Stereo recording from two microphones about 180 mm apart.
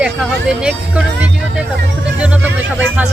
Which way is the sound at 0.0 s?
5° right (ahead or behind).